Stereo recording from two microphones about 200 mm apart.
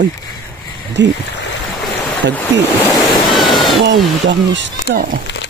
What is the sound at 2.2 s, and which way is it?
Speech, 65° right (ahead or behind).